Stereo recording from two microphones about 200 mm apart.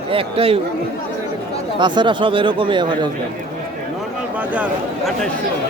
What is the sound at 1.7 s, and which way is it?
A man's voice, 20° right (ahead or behind).